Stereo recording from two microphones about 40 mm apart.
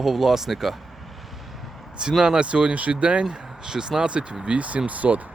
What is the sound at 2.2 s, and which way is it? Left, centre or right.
Speech, right.